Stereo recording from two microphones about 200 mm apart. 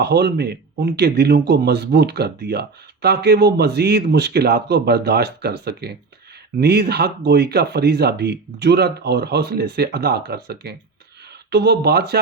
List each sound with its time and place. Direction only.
0.0 s a man's voice: 55° right (ahead or behind)